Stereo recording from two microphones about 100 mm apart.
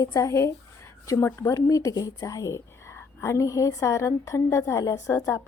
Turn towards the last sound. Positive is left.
turn(degrees=35)  # may be behind; listen again after turning